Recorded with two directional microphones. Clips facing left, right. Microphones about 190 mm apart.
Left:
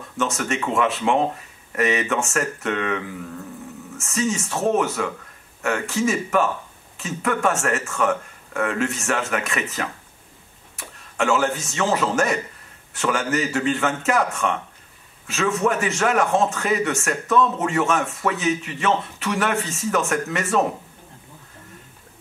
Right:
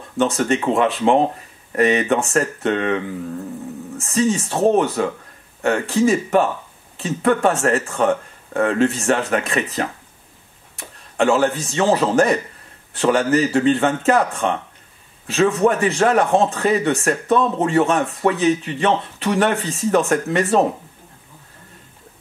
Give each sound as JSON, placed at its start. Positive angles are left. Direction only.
{"t": 0.2, "sound": "speech", "side_deg": -35}
{"t": 4.0, "sound": "speech", "side_deg": -30}